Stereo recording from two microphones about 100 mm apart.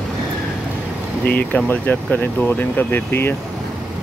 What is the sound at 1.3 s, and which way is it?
Speech, 15° left (ahead or behind).